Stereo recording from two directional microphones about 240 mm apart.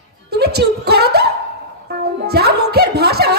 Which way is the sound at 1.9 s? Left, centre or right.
Right.